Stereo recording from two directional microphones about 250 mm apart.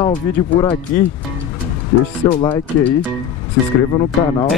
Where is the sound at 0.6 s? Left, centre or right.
Centre.